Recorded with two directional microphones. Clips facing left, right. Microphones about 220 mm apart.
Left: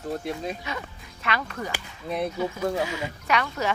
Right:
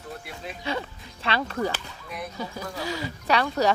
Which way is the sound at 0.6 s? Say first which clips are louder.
Right 4 dB; 30° right (ahead or behind).